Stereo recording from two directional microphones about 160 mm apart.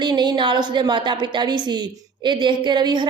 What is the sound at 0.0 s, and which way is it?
A woman's voice, 25° right (ahead or behind).